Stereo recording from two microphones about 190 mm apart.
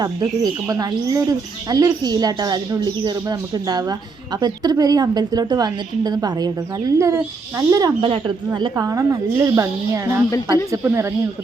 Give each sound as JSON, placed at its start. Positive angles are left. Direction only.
{"t": 0.0, "sound": "speech", "side_deg": -20}